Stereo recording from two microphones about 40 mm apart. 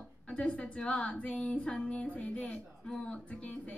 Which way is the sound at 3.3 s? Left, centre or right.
Left.